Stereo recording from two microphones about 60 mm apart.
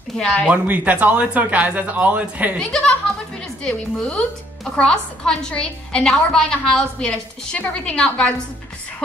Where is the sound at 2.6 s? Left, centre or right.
Centre.